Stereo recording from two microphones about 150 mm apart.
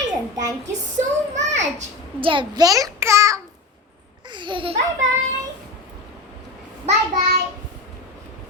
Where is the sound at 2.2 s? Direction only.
35° right (ahead or behind).